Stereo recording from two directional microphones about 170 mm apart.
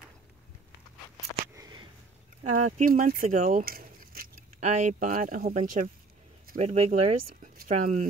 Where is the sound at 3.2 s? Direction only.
50° right (ahead or behind).